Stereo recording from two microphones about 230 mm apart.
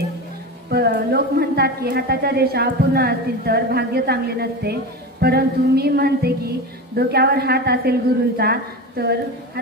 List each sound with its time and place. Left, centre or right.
0.7 s a woman's voice: right